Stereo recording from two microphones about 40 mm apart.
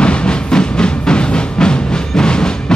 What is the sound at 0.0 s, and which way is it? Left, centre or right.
Music, left.